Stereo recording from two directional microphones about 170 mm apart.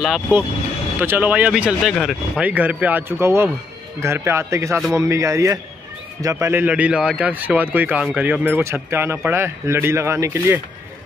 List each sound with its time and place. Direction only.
0.0 s speech: centre (ahead or behind)